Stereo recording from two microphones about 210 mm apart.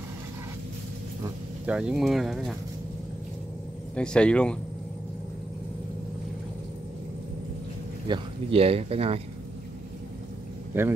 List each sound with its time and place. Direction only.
1.7 s speech: 5° right (ahead or behind)
3.9 s speech: 5° left (ahead or behind)
8.1 s speech: 25° right (ahead or behind)
10.7 s a man's voice: 10° right (ahead or behind)